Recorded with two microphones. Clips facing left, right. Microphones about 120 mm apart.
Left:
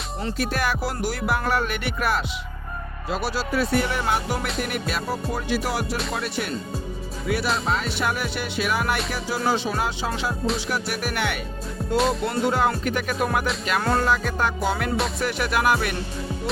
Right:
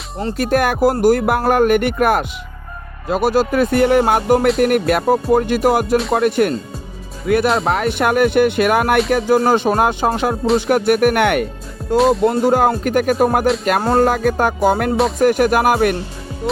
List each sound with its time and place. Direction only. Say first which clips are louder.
0.3 s speech: right 10 dB; 50° right (ahead or behind)
11.9 s speech: right 9 dB; centre (ahead or behind)
12.2 s speech: right 8 dB; 45° right (ahead or behind)